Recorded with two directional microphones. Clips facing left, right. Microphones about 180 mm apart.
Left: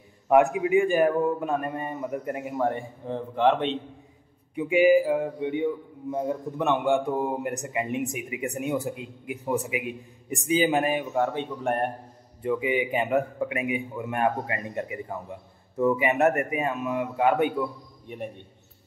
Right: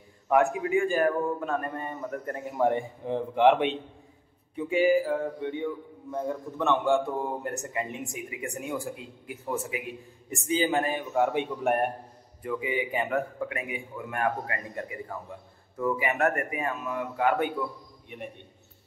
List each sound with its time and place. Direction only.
0.3 s a man's voice: 20° left (ahead or behind)
2.5 s a man's voice: 15° right (ahead or behind)
4.6 s a man's voice: 15° left (ahead or behind)
11.1 s a man's voice: 10° right (ahead or behind)
12.4 s a man's voice: 20° left (ahead or behind)
18.1 s a man's voice: 35° left (ahead or behind)